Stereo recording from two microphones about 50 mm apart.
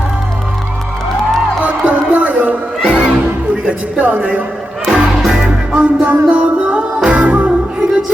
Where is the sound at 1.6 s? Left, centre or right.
Right.